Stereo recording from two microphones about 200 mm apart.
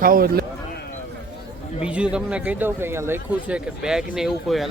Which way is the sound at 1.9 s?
5° right (ahead or behind).